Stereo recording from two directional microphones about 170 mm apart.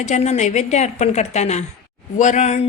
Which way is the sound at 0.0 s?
45° left (ahead or behind).